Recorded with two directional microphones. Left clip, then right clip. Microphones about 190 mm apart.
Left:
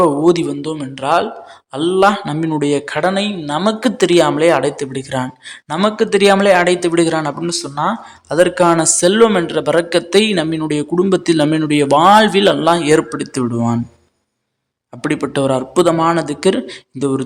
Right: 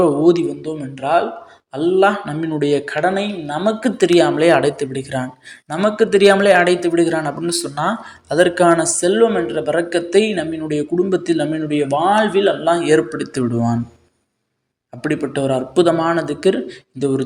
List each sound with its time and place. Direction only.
0.0 s a man's voice: 10° left (ahead or behind)
15.0 s speech: 15° left (ahead or behind)